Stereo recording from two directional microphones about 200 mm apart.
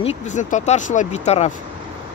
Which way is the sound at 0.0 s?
35° left (ahead or behind).